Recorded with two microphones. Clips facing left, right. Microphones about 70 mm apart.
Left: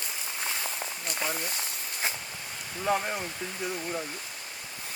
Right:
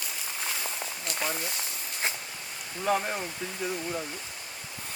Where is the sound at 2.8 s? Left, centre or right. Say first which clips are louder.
Right 1 dB; centre.